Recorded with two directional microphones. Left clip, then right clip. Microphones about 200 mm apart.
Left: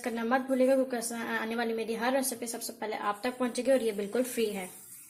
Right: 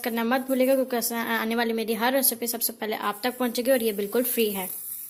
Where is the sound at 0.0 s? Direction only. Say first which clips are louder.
Right 4 dB; 40° right (ahead or behind).